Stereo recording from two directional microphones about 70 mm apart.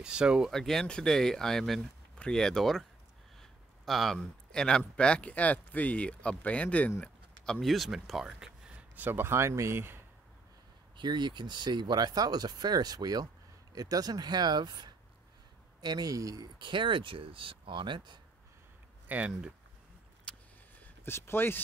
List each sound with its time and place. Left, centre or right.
0.0 s speech: centre
0.5 s speech: centre
3.3 s a sound: centre
4.2 s speech: centre
7.6 s speech: centre
8.9 s speech: right
11.0 s speech: right
15.8 s speech: right
19.0 s speech: right
20.3 s vehicle: centre
20.8 s speech: left